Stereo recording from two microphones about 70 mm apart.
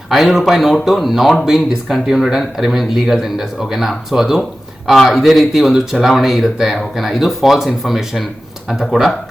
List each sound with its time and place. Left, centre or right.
0.1 s speech: centre